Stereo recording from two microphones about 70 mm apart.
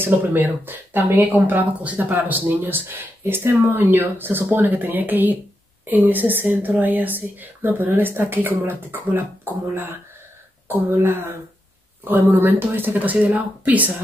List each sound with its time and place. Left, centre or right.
0.0 s a woman's voice: right
10.7 s a woman's voice: right